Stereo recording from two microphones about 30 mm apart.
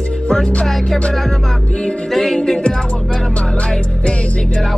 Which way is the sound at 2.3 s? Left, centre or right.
Centre.